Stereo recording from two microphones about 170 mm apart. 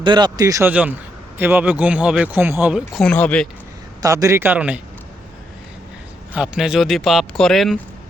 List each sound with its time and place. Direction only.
0.0 s speech: 25° right (ahead or behind); by 2.8 s 10° right (ahead or behind)
2.9 s speech: 5° left (ahead or behind)
4.0 s speech: 20° right (ahead or behind)
6.3 s speech: 5° right (ahead or behind)